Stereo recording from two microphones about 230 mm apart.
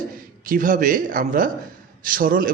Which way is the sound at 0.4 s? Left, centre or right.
Right.